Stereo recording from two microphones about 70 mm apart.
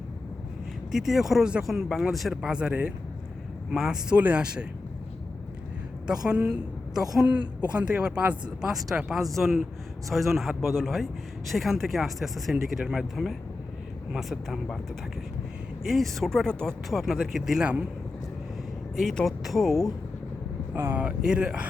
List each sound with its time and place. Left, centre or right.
0.9 s a woman's voice: centre
6.1 s a woman's voice: centre
7.3 s a woman's voice: centre
8.6 s speech: centre
15.9 s speech: centre
16.9 s speech: centre
18.9 s speech: centre
20.7 s speech: right
21.0 s a woman's voice: centre